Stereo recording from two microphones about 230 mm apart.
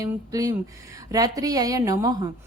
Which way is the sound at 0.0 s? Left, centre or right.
Centre.